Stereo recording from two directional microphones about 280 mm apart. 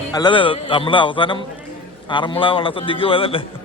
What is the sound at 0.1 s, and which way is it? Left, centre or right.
A man's voice, centre.